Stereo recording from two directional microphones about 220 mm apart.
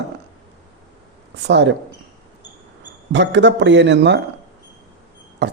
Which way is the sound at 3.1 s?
55° right (ahead or behind).